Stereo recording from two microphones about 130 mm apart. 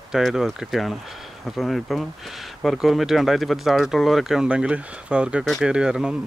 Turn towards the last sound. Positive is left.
turn(degrees=-5)  # may be behind; listen again after turning